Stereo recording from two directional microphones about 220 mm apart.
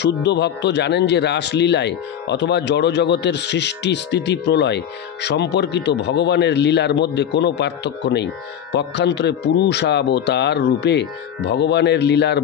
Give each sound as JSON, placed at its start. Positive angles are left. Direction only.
{"t": 0.0, "sound": "speech", "side_deg": 50}